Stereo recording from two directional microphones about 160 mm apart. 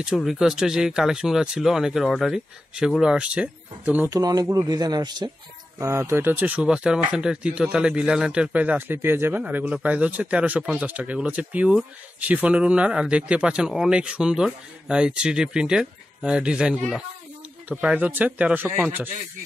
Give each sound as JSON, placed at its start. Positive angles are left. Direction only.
{"t": 0.0, "sound": "speech", "side_deg": -5}
{"t": 4.1, "sound": "speech", "side_deg": -25}